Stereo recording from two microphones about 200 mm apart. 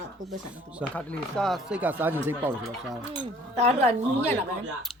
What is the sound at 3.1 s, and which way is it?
Speech, 30° right (ahead or behind).